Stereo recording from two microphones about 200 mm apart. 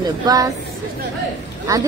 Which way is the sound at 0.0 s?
20° right (ahead or behind).